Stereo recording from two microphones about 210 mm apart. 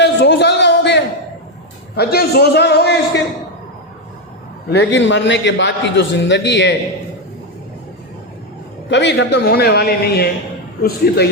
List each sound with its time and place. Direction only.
0.0 s a sound: 55° left (ahead or behind)
2.0 s a man's voice: 50° left (ahead or behind)
4.7 s a man's voice: 55° left (ahead or behind)
8.9 s a man's voice: 55° left (ahead or behind)